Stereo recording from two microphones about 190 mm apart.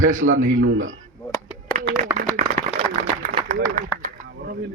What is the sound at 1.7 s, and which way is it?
Clapping, 50° right (ahead or behind).